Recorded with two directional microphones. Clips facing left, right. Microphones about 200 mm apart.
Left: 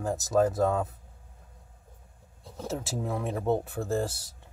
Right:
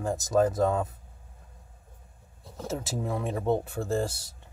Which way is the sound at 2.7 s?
Centre (ahead or behind).